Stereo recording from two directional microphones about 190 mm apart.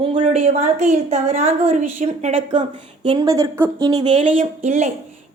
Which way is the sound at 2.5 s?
25° right (ahead or behind).